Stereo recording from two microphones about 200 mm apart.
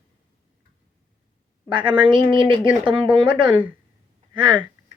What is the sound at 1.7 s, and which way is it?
A woman's voice, 25° right (ahead or behind).